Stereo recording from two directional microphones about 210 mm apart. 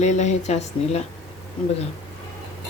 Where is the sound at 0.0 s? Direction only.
35° left (ahead or behind).